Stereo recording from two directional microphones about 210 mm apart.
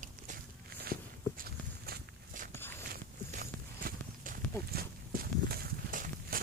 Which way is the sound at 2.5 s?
10° left (ahead or behind).